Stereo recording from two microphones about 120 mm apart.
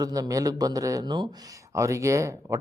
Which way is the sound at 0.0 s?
30° right (ahead or behind).